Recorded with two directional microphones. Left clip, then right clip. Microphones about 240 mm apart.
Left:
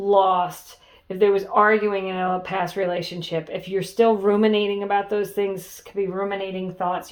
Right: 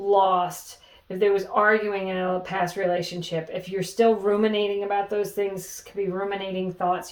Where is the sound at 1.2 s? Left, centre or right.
Left.